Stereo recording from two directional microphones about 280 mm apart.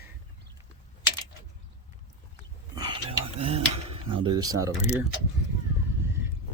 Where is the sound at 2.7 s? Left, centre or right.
Centre.